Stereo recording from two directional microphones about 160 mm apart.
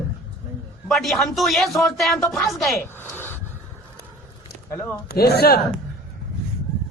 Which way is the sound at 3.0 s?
10° left (ahead or behind).